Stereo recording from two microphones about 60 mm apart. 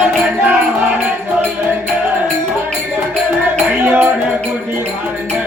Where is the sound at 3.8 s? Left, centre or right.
Right.